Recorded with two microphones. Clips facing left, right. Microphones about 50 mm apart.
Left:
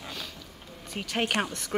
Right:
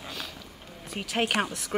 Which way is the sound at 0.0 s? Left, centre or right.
Centre.